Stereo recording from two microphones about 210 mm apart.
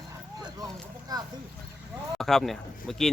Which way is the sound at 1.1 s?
20° right (ahead or behind).